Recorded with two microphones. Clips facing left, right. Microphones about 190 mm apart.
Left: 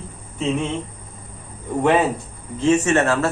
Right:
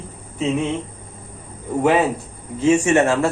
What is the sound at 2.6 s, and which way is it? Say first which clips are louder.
Speech: right 2 dB; 10° right (ahead or behind).